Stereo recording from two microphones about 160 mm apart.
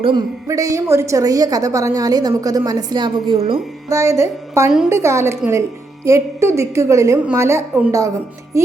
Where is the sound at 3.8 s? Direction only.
15° right (ahead or behind).